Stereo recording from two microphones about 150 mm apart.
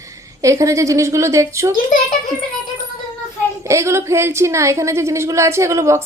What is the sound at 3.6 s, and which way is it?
A woman's voice, 20° right (ahead or behind).